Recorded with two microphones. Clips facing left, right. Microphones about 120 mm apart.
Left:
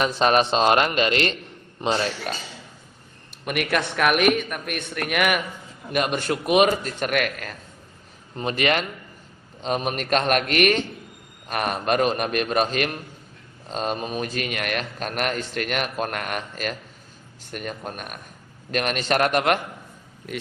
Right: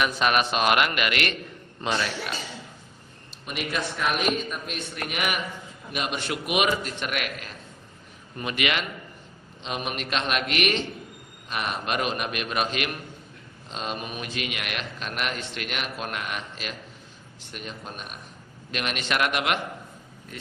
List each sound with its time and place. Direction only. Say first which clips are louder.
0.0 s speech: left 4 dB; 35° left (ahead or behind)
3.4 s speech: left 6 dB; 65° left (ahead or behind); by 7.5 s 45° left (ahead or behind)
8.4 s speech: left 5 dB; 35° left (ahead or behind)